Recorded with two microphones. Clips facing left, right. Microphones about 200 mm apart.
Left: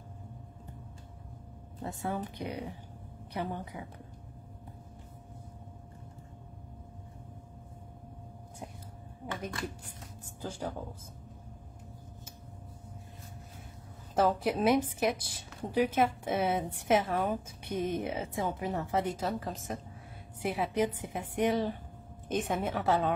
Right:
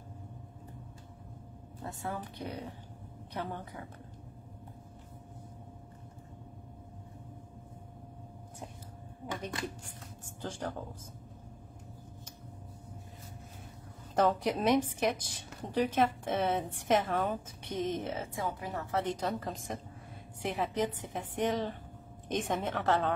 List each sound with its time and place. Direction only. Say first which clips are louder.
1.8 s a woman's voice: left 4 dB; 20° left (ahead or behind)
9.2 s a sound: left 1 dB; 5° left (ahead or behind)
10.4 s a woman's voice: left 1 dB; 10° left (ahead or behind)
14.1 s a woman's voice: left 1 dB; 5° left (ahead or behind); by 19.0 s 20° left (ahead or behind)
19.0 s a woman's voice: even; 5° left (ahead or behind)